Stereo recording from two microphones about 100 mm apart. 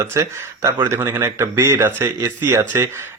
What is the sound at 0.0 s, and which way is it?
Speech, 30° right (ahead or behind).